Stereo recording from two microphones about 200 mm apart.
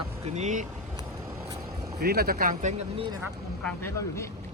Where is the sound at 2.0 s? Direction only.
50° right (ahead or behind); by 3.1 s 35° right (ahead or behind).